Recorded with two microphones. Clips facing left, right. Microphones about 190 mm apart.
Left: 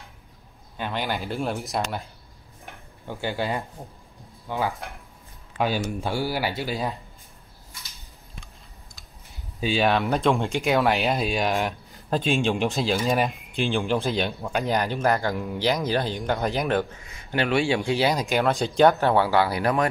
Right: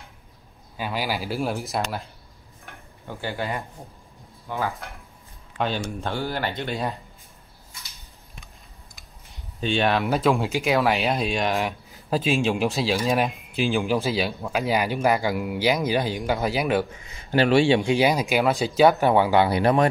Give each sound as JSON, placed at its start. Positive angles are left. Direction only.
{"t": 0.7, "sound": "speech", "side_deg": -5}
{"t": 3.1, "sound": "speech", "side_deg": 20}
{"t": 9.6, "sound": "speech", "side_deg": 0}
{"t": 17.3, "sound": "speech", "side_deg": -35}